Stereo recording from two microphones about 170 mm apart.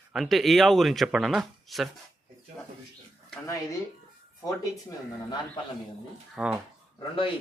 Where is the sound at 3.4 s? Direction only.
20° left (ahead or behind).